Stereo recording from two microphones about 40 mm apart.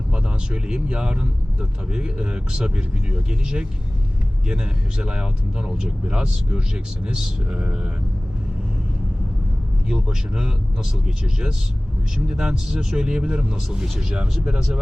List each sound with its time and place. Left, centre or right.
0.1 s speech: right
9.9 s speech: centre